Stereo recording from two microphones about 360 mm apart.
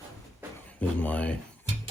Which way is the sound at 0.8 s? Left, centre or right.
Centre.